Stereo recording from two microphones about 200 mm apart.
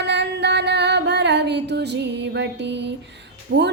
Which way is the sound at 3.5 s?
60° right (ahead or behind).